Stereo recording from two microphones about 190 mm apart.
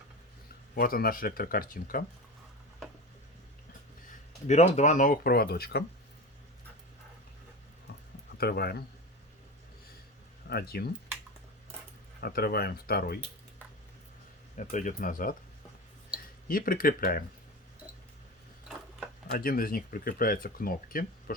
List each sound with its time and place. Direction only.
0.8 s speech: 50° left (ahead or behind)
4.4 s speech: 40° left (ahead or behind); by 5.8 s 55° left (ahead or behind)
8.4 s speech: 55° left (ahead or behind)
10.5 s speech: 55° left (ahead or behind)
12.2 s speech: 55° left (ahead or behind)
14.5 s speech: 40° left (ahead or behind)
16.5 s speech: 50° left (ahead or behind)
19.3 s speech: 50° left (ahead or behind)